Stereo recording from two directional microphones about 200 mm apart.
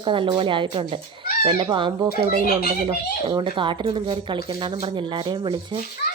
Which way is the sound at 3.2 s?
25° right (ahead or behind).